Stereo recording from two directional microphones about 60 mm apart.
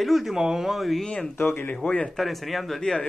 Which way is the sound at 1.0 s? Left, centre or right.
Centre.